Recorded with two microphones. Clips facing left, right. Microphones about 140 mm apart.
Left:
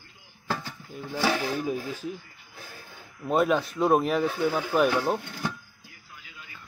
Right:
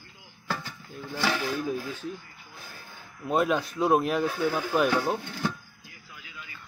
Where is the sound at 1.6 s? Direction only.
5° left (ahead or behind).